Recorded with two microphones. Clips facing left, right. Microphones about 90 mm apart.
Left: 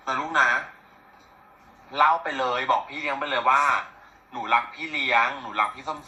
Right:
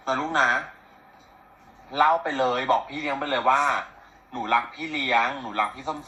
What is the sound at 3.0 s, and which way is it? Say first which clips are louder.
Speech: right 1 dB; 25° right (ahead or behind).